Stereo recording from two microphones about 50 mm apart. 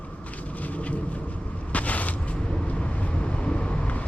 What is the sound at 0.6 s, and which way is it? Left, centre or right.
Thunder, left.